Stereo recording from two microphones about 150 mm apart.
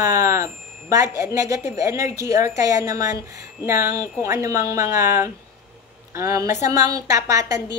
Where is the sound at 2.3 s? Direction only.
50° left (ahead or behind).